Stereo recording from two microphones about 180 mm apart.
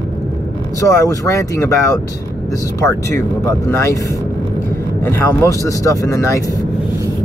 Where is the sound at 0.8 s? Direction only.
15° left (ahead or behind).